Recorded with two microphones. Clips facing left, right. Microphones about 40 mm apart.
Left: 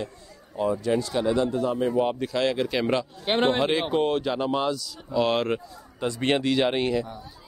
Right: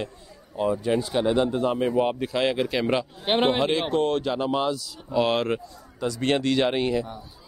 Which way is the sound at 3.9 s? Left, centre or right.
Centre.